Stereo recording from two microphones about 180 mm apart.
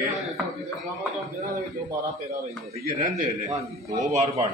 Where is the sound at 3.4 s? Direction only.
15° right (ahead or behind).